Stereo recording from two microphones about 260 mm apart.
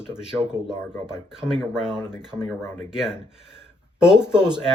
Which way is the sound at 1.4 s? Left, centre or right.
Centre.